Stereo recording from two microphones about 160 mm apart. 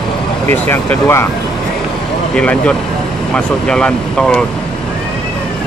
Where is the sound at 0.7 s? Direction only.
15° left (ahead or behind).